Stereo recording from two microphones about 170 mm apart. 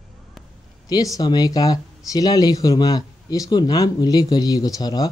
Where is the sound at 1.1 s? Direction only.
20° left (ahead or behind).